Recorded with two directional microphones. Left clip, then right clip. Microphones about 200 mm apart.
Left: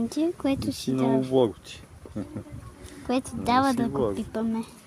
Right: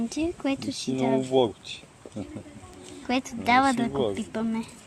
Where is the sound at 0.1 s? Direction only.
15° left (ahead or behind).